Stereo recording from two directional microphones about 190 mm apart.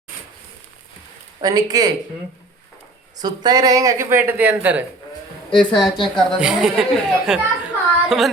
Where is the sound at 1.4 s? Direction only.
20° right (ahead or behind).